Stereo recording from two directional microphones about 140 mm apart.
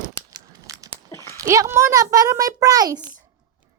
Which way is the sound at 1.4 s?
20° right (ahead or behind).